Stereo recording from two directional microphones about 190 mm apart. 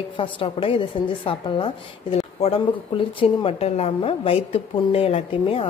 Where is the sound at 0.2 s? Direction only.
30° left (ahead or behind).